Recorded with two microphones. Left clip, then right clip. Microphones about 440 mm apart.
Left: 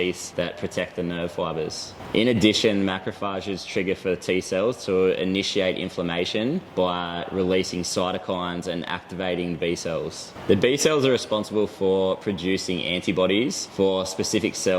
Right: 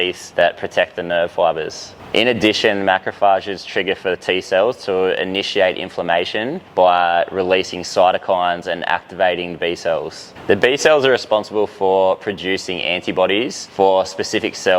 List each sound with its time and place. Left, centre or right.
0.0 s speech: right